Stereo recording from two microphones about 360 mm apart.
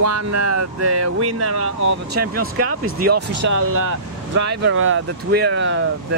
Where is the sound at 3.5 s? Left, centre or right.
Right.